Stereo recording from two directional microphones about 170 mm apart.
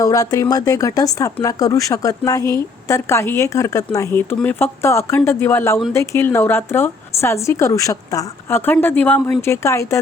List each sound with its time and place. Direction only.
0.0 s a woman's voice: 20° left (ahead or behind)